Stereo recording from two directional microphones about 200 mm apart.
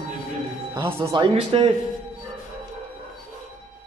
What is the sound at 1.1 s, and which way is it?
Speech, 25° right (ahead or behind).